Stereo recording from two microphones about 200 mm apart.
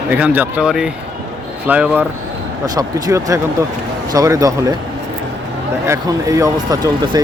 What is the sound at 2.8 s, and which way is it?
Speech, 15° right (ahead or behind).